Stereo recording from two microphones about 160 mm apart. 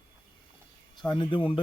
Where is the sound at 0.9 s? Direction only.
30° left (ahead or behind).